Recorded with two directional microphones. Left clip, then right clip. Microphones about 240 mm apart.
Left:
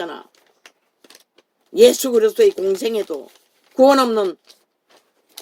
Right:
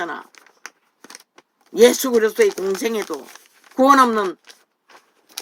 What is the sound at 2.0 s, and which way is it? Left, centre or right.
Speech, right.